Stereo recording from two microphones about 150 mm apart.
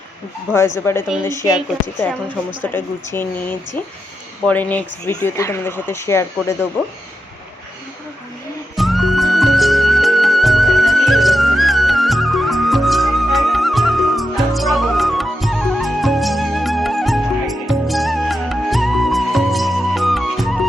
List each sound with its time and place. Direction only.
0.5 s speech: 15° left (ahead or behind)
2.7 s speech: 15° left (ahead or behind)
4.4 s speech: 10° left (ahead or behind)
8.7 s music: centre (ahead or behind)